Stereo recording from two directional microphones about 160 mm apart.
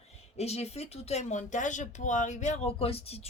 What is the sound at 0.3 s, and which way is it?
A woman's voice, 40° left (ahead or behind).